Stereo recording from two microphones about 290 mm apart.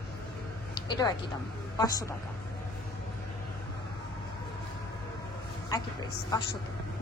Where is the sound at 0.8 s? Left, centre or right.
Centre.